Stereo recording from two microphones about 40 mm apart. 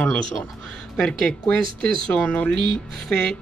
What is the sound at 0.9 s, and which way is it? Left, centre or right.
Speech, centre.